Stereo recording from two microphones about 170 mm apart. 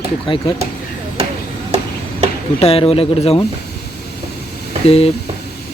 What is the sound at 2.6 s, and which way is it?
Speech, 35° left (ahead or behind).